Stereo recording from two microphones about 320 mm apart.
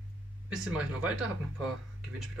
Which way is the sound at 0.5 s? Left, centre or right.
Centre.